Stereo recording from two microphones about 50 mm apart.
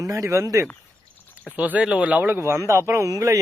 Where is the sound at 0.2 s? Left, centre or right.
Right.